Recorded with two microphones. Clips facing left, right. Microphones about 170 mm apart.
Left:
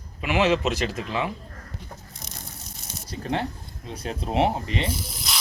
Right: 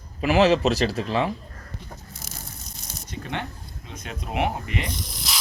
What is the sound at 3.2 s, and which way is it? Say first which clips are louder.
Speech: left 6 dB; 35° left (ahead or behind).